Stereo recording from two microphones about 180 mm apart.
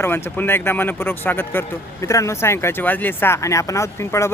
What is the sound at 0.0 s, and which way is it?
Speech, 10° left (ahead or behind).